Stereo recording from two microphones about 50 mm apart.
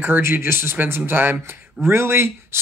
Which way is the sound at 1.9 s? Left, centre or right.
Right.